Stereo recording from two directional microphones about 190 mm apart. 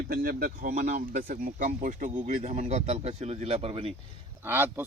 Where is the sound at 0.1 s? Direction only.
50° right (ahead or behind); by 3.9 s 30° right (ahead or behind).